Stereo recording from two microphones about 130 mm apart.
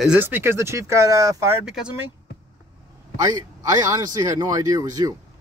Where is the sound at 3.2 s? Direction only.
30° right (ahead or behind).